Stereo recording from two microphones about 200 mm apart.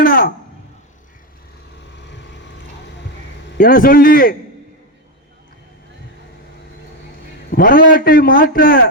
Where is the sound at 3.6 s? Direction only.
45° left (ahead or behind).